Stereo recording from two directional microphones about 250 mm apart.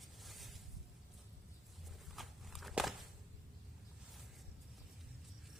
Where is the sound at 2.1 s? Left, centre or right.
Centre.